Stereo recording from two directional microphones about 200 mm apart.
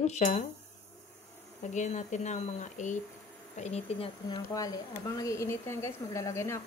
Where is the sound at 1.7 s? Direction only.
35° left (ahead or behind).